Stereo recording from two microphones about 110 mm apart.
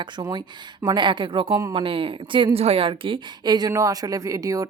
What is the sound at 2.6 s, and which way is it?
Speech, 60° right (ahead or behind).